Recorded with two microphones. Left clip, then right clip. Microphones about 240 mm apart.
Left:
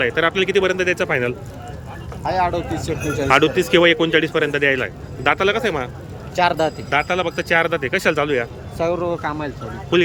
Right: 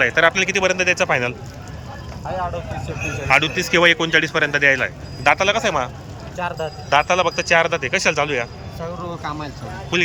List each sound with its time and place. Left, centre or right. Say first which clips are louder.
0.0 s speech: right 2 dB; centre
2.3 s speech: left 6 dB; left
3.2 s speech: left 2 dB; centre
6.3 s speech: left 8 dB; left
6.9 s speech: right 6 dB; centre